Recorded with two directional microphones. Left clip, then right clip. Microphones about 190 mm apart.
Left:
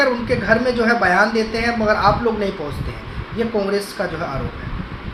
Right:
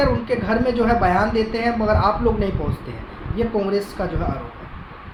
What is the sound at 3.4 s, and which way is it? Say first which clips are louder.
Speech: left 1 dB; 35° right (ahead or behind).